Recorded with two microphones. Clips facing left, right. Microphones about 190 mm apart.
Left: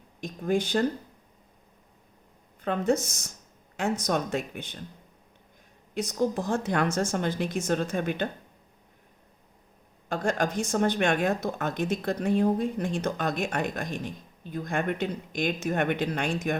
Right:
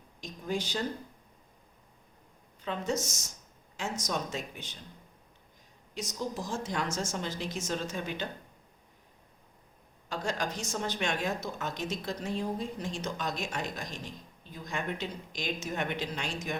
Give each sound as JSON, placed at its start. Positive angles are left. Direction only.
{"t": 0.2, "sound": "speech", "side_deg": 55}
{"t": 2.6, "sound": "speech", "side_deg": 55}
{"t": 5.9, "sound": "speech", "side_deg": 55}
{"t": 10.1, "sound": "speech", "side_deg": 50}